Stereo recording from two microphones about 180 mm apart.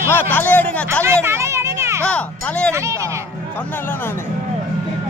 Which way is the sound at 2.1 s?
5° left (ahead or behind).